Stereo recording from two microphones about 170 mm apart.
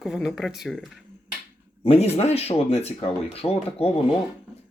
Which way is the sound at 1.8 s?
35° left (ahead or behind).